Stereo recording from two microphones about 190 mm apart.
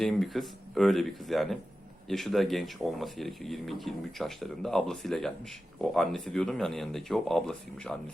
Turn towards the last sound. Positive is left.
turn(degrees=5)  # may be behind; listen again after turning